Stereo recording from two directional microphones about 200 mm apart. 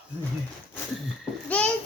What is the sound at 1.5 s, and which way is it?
Speech, 5° left (ahead or behind).